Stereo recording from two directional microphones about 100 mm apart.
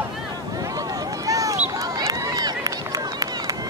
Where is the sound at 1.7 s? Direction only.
35° right (ahead or behind).